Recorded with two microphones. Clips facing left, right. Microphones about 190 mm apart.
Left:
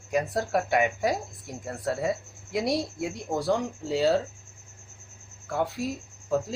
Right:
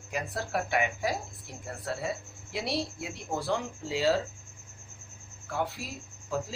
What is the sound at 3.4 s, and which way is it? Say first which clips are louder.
Speech: left 5 dB; 40° left (ahead or behind).